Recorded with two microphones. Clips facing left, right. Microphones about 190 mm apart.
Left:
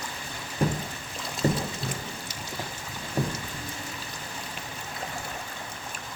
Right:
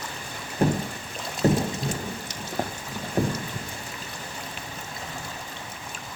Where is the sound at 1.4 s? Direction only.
75° right (ahead or behind).